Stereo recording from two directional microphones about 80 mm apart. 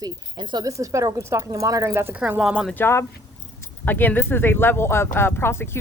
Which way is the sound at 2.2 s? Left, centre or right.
Centre.